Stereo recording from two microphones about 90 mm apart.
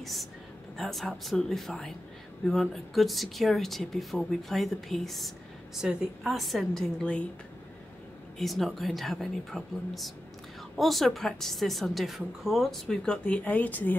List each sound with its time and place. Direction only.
0.0 s a woman's voice: centre (ahead or behind)
8.4 s a woman's voice: centre (ahead or behind); by 13.9 s 20° left (ahead or behind)